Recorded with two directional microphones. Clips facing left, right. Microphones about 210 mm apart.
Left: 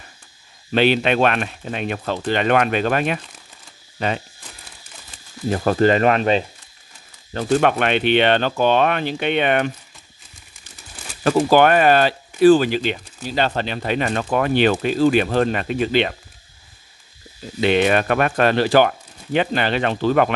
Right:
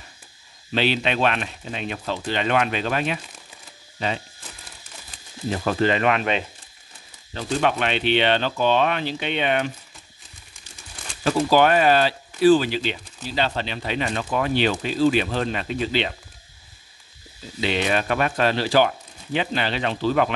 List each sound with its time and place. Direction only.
0.7 s speech: 55° left (ahead or behind)
5.5 s speech: 45° left (ahead or behind)
7.3 s speech: 55° left (ahead or behind)
11.2 s speech: 55° left (ahead or behind)
17.6 s speech: 55° left (ahead or behind)